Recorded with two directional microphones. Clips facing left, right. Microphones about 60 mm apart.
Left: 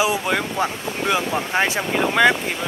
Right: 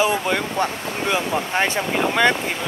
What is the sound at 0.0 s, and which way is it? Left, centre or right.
Speech, centre.